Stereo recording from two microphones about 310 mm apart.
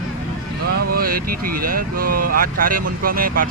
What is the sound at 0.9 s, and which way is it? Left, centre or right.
Speech, right.